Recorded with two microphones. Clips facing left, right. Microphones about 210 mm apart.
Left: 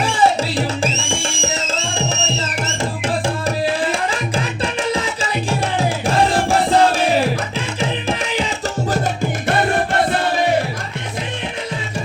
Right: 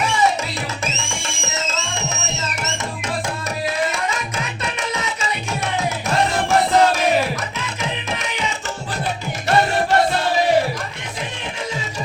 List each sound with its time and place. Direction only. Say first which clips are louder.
0.0 s music: left 3 dB; 30° left (ahead or behind)
3.2 s tabla: left 5 dB; 30° left (ahead or behind)
4.6 s music: left 5 dB; 30° left (ahead or behind)
9.5 s music: right 2 dB; 50° left (ahead or behind)